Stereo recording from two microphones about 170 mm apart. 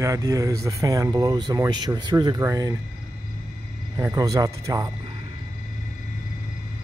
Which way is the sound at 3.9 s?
20° right (ahead or behind).